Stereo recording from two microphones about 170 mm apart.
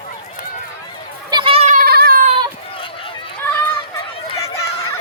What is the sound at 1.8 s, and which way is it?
Cat, 65° right (ahead or behind).